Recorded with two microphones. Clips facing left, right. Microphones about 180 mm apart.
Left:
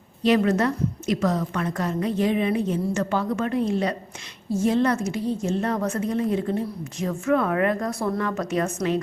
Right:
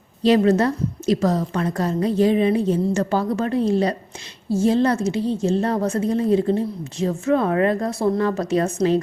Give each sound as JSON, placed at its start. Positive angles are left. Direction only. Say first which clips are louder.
{"t": 0.2, "sound": "a woman's voice", "louder": "right 4 dB", "side_deg": -30}